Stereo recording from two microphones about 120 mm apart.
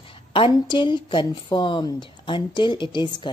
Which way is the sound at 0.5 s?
40° left (ahead or behind).